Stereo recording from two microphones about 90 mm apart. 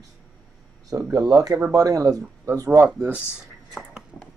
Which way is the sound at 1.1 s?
45° right (ahead or behind).